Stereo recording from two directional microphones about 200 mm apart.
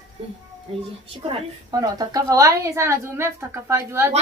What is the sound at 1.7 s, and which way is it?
A woman's voice, 20° right (ahead or behind).